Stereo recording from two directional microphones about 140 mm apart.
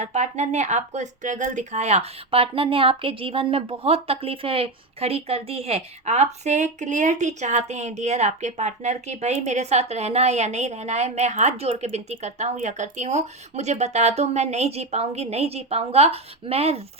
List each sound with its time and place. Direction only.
0.0 s speech: 55° right (ahead or behind)